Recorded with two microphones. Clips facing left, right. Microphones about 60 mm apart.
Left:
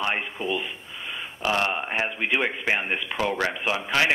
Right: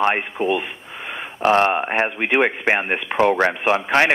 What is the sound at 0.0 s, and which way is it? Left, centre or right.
Speech, right.